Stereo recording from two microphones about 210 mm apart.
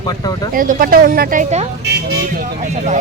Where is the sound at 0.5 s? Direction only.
40° right (ahead or behind).